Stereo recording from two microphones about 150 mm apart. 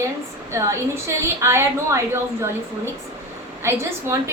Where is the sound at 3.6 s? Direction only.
20° right (ahead or behind).